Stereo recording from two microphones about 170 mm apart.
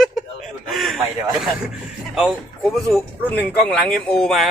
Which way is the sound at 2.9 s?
5° left (ahead or behind).